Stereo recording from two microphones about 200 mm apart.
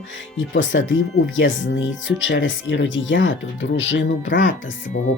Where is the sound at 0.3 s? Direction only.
70° left (ahead or behind).